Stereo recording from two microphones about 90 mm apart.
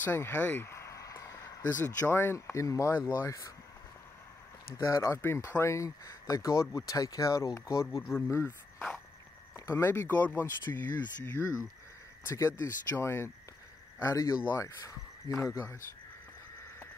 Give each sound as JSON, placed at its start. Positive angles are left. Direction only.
{"t": 0.0, "sound": "speech", "side_deg": 25}
{"t": 4.8, "sound": "speech", "side_deg": 35}
{"t": 9.7, "sound": "speech", "side_deg": 30}